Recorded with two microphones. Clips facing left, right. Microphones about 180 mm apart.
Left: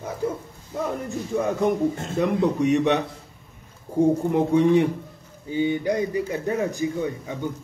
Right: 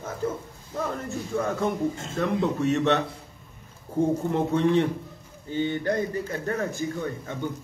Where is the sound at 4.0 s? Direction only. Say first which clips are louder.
Left 4 dB; 10° left (ahead or behind).